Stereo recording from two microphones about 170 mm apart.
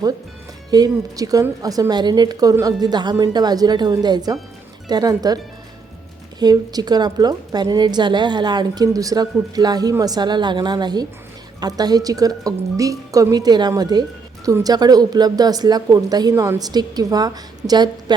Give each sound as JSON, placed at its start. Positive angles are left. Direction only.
{"t": 0.7, "sound": "a woman's voice", "side_deg": -20}
{"t": 6.4, "sound": "a woman's voice", "side_deg": -25}